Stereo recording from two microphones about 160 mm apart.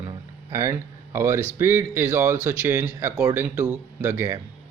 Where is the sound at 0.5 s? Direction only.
15° right (ahead or behind).